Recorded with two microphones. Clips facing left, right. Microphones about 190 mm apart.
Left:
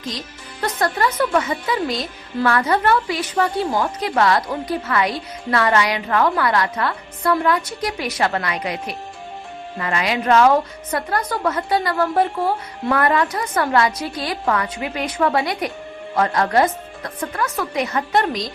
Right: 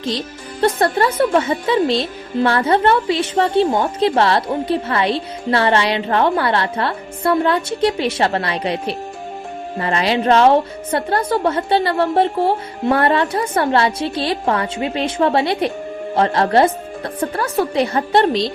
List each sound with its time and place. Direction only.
0.0 s a woman's voice: 30° right (ahead or behind)